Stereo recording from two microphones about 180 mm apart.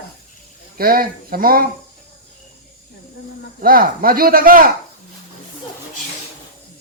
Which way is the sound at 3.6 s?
55° right (ahead or behind).